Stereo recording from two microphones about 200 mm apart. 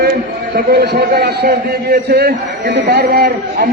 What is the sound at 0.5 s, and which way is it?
A man's voice, 50° right (ahead or behind).